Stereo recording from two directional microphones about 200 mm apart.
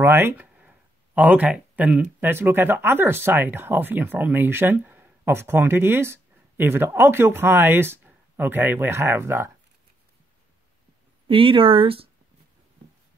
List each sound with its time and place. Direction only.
0.0 s speech: 10° right (ahead or behind)
11.2 s speech: 25° right (ahead or behind)